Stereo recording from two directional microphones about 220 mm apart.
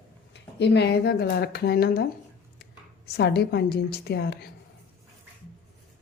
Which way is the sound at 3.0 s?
45° left (ahead or behind).